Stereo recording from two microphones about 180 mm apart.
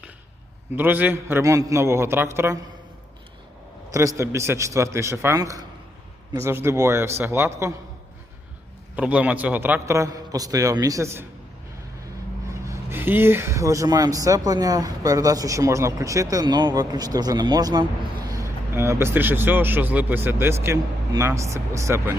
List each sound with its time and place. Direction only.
0.8 s speech: 10° right (ahead or behind)
3.9 s speech: 15° right (ahead or behind)
9.0 s speech: 10° right (ahead or behind)
12.5 s speech: 15° right (ahead or behind)